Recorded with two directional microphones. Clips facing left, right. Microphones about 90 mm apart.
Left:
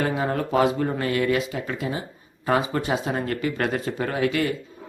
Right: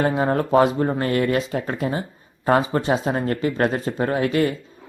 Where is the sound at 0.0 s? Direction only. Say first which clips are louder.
Right 4 dB; 35° right (ahead or behind).